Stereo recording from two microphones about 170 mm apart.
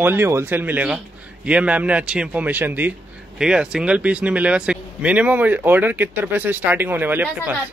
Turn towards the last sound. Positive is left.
turn(degrees=-10)  # may be behind; listen again after turning